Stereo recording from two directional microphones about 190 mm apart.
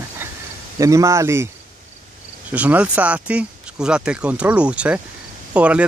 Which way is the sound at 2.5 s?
5° right (ahead or behind).